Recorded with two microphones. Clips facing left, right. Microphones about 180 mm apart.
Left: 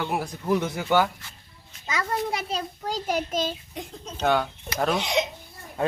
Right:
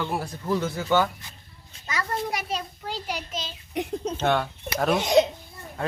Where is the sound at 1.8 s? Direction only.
25° left (ahead or behind).